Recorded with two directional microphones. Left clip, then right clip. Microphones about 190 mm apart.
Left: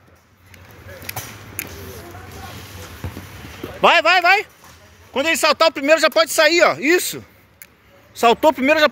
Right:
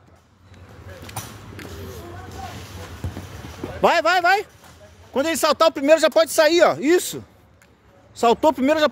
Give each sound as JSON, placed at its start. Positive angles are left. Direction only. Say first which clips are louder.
{"t": 3.8, "sound": "speech", "louder": "left 4 dB", "side_deg": -10}